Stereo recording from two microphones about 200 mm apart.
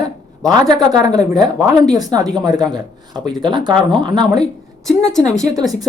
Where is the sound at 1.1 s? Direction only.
Centre (ahead or behind).